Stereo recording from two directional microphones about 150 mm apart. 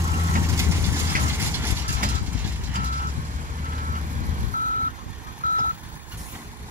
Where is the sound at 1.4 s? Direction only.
15° right (ahead or behind).